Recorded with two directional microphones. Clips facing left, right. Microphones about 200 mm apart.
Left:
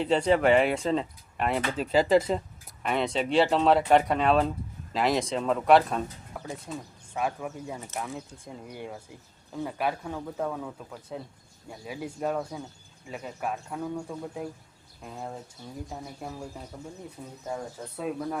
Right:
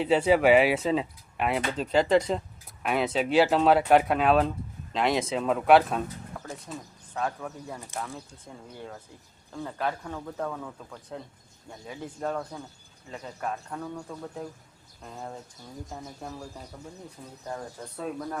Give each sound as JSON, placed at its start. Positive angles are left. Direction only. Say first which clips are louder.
{"t": 0.0, "sound": "speech", "louder": "right 1 dB", "side_deg": -5}